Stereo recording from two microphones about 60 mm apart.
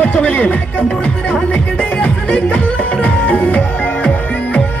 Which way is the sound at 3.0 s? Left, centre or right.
Left.